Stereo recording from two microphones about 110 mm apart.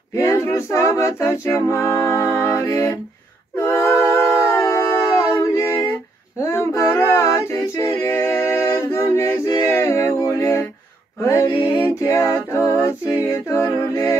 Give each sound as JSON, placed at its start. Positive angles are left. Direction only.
{"t": 0.1, "sound": "a capella", "side_deg": 25}
{"t": 3.6, "sound": "a sound", "side_deg": 25}
{"t": 8.0, "sound": "a capella", "side_deg": 25}
{"t": 9.7, "sound": "music", "side_deg": 25}
{"t": 11.2, "sound": "a sound", "side_deg": 25}
{"t": 12.0, "sound": "a capella", "side_deg": 25}